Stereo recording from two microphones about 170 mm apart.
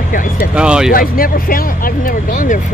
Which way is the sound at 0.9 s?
55° left (ahead or behind).